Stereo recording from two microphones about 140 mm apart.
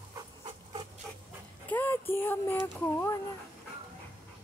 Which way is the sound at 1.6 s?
15° left (ahead or behind).